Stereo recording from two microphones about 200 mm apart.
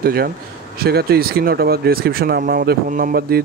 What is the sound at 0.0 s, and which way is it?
A man's voice, 50° right (ahead or behind).